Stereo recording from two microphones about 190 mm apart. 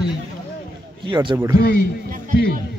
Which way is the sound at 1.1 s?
25° right (ahead or behind).